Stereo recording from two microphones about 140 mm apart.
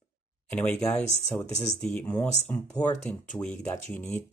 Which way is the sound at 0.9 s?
55° left (ahead or behind).